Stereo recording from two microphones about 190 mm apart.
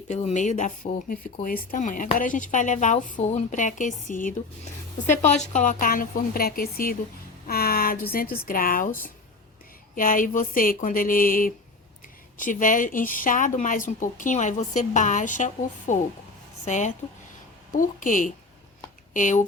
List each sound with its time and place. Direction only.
0.1 s speech: 35° left (ahead or behind)
9.9 s speech: 45° left (ahead or behind)